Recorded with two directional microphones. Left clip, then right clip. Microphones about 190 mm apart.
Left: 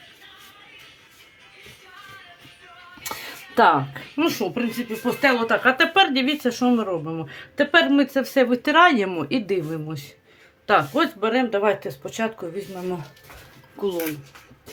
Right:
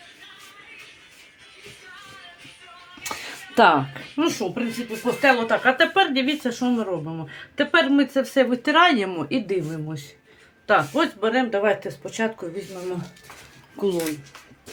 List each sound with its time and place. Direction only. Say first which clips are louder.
3.0 s music: right 1 dB; 5° left (ahead or behind)
3.5 s speech: even; 10° right (ahead or behind)
4.2 s speech: left 1 dB; 25° left (ahead or behind)
13.7 s speech: right 1 dB; 10° right (ahead or behind)